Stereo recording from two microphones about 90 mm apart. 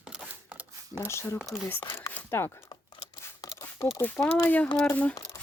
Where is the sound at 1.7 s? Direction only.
20° left (ahead or behind).